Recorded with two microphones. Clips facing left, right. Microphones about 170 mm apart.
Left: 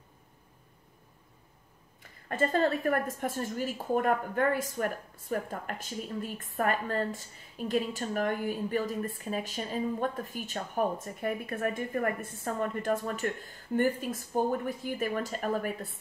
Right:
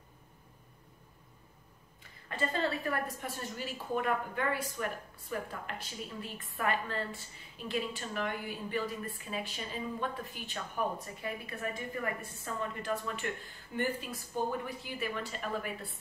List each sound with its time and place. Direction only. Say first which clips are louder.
2.2 s a woman's voice: left 6 dB; 50° left (ahead or behind)